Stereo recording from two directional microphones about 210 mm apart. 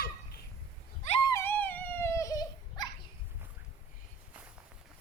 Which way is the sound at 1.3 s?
10° left (ahead or behind).